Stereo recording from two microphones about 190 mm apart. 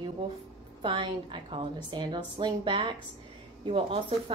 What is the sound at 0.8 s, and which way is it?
A woman's voice, 25° right (ahead or behind).